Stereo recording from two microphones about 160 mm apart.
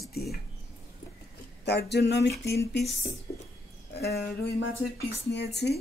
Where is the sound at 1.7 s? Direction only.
90° left.